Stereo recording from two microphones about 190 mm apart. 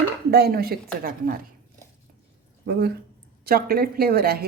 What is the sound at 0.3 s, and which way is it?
Speech, 55° right (ahead or behind).